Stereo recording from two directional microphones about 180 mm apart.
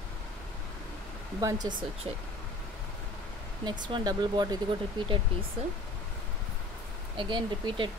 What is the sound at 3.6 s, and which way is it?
Speech, 25° right (ahead or behind).